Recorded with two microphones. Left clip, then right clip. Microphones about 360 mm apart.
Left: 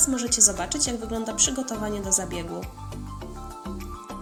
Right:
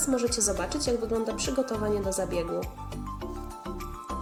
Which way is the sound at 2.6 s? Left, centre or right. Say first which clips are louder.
Right 2 dB; centre.